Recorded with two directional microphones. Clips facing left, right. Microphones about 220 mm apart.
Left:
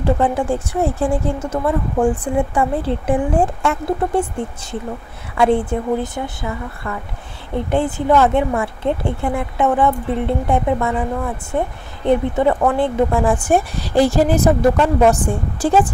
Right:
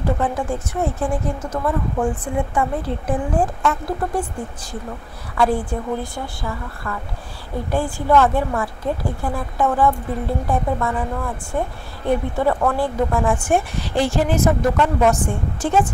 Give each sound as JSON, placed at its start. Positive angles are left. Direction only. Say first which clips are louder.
{"t": 0.0, "sound": "speech", "louder": "left 4 dB", "side_deg": 30}
{"t": 5.4, "sound": "a woman's voice", "louder": "left 4 dB", "side_deg": 25}